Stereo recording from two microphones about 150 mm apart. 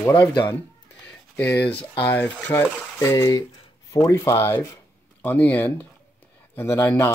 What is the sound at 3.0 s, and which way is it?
Speech, 25° left (ahead or behind).